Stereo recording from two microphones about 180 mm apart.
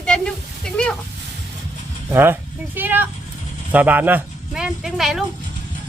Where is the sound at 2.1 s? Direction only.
10° right (ahead or behind).